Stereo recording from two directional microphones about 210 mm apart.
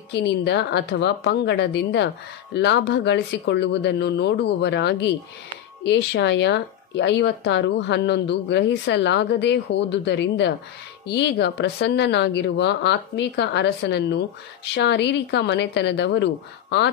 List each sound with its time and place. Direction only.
0.1 s speech: 55° left (ahead or behind)